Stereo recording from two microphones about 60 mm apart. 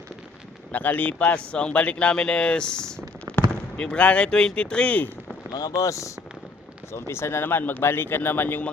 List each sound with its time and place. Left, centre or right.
0.7 s speech: left
5.5 s speech: left
6.9 s speech: left